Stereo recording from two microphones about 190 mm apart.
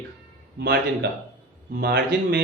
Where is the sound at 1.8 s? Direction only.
60° right (ahead or behind).